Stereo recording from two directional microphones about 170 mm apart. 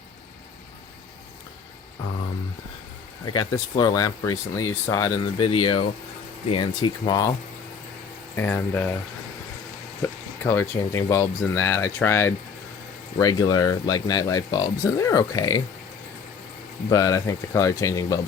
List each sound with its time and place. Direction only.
3.2 s speech: 20° left (ahead or behind)
8.4 s speech: 10° left (ahead or behind)
10.0 s speech: 15° left (ahead or behind)
16.9 s speech: 20° left (ahead or behind)